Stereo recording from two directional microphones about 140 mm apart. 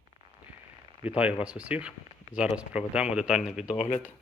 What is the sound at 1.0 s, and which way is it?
Speech, 10° right (ahead or behind).